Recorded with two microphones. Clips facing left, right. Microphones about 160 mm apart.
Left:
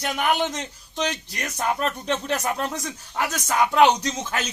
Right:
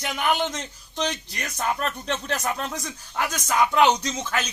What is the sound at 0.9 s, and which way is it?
A man's voice, centre (ahead or behind).